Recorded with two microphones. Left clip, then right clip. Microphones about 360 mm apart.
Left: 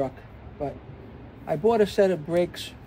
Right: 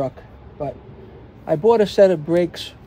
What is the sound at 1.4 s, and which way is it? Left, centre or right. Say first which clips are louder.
Speech: right 6 dB; right.